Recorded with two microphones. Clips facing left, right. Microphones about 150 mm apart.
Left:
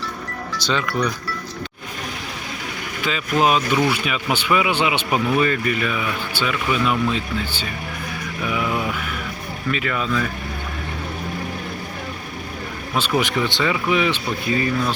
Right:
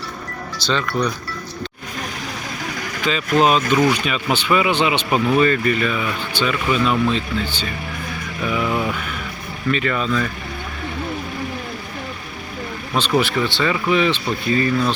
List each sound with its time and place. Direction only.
0.7 s speech: 10° left (ahead or behind)
3.0 s speech: 10° left (ahead or behind)
8.4 s vehicle: 5° left (ahead or behind)
9.7 s speech: 5° left (ahead or behind)
12.9 s speech: 10° left (ahead or behind)